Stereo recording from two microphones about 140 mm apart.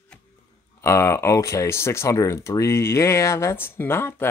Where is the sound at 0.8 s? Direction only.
20° left (ahead or behind).